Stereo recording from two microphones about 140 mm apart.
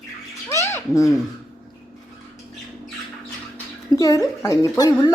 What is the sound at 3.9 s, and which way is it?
Speech, 25° left (ahead or behind).